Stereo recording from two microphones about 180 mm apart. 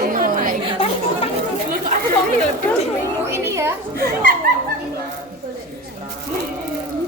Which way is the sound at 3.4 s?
15° right (ahead or behind).